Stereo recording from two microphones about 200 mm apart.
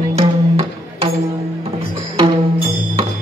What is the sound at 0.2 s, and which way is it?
Music, 30° right (ahead or behind).